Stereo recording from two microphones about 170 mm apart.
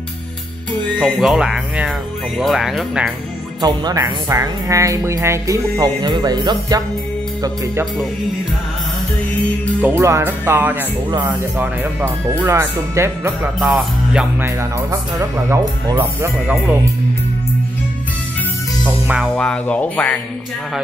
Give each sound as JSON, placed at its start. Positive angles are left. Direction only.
{"t": 0.8, "sound": "speech", "side_deg": 0}
{"t": 3.6, "sound": "speech", "side_deg": -20}
{"t": 9.8, "sound": "speech", "side_deg": -10}
{"t": 11.5, "sound": "speech", "side_deg": -10}
{"t": 13.6, "sound": "speech", "side_deg": 0}
{"t": 14.4, "sound": "speech", "side_deg": -20}
{"t": 18.9, "sound": "music", "side_deg": -10}
{"t": 19.3, "sound": "speech", "side_deg": 5}